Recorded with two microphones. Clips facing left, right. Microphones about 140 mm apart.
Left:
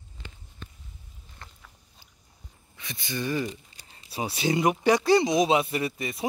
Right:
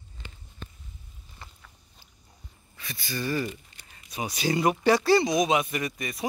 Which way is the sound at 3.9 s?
30° left (ahead or behind).